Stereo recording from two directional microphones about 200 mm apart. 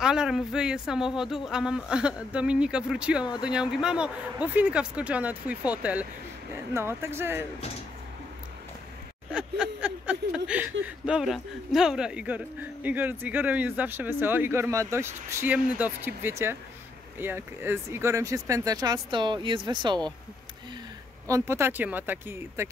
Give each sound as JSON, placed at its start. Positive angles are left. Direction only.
{"t": 0.0, "sound": "speech", "side_deg": -5}
{"t": 9.3, "sound": "speech", "side_deg": -5}
{"t": 21.3, "sound": "speech", "side_deg": -15}